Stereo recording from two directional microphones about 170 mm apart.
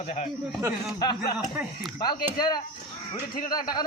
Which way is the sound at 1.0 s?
25° left (ahead or behind).